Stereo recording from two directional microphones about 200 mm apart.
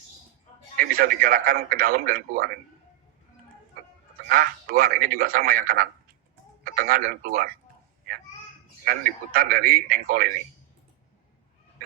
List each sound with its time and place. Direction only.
0.8 s speech: 45° right (ahead or behind)
4.3 s speech: 45° right (ahead or behind)
8.8 s speech: 45° right (ahead or behind)